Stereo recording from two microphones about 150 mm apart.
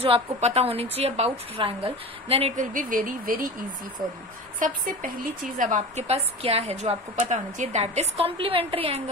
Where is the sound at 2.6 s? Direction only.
65° right (ahead or behind).